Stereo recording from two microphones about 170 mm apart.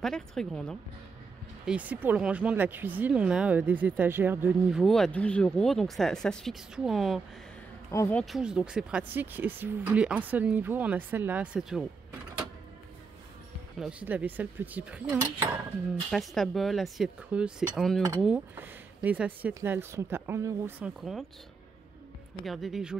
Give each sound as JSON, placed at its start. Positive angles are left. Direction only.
{"t": 0.0, "sound": "speech", "side_deg": 5}
{"t": 1.7, "sound": "speech", "side_deg": -10}
{"t": 7.9, "sound": "a woman's voice", "side_deg": 15}
{"t": 8.2, "sound": "speech", "side_deg": 0}
{"t": 13.7, "sound": "speech", "side_deg": -5}
{"t": 16.1, "sound": "speech", "side_deg": 0}
{"t": 21.0, "sound": "speech", "side_deg": 0}
{"t": 22.4, "sound": "speech", "side_deg": 0}